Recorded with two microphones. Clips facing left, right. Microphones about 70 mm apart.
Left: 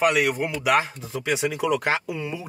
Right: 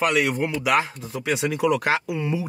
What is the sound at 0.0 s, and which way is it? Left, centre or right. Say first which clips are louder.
Speech: even; centre.